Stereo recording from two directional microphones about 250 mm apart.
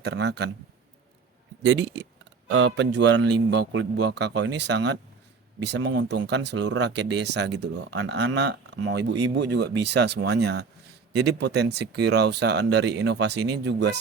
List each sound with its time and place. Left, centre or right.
0.0 s speech: right
1.6 s speech: right